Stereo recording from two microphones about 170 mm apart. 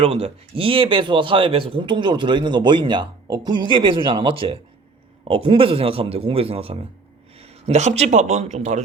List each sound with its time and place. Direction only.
0.0 s a man's voice: 35° right (ahead or behind)